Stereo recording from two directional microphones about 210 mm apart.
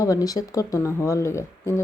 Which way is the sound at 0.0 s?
15° left (ahead or behind).